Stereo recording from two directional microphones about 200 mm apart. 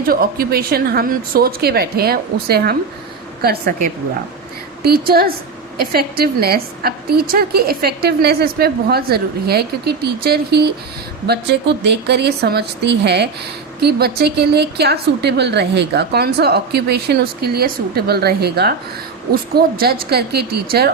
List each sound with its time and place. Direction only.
0.0 s a woman's voice: 50° right (ahead or behind)